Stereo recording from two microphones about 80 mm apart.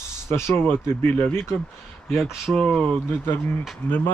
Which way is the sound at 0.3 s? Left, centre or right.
Left.